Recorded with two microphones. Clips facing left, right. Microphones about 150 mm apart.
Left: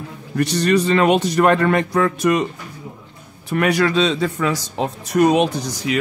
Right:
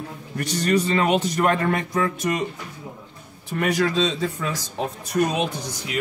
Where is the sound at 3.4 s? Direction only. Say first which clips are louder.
Left 5 dB; 80° left.